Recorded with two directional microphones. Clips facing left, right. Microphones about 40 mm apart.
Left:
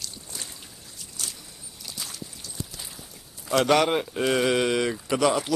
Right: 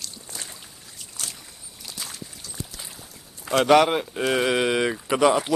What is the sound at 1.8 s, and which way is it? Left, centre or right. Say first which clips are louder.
Splash: right 1 dB; centre.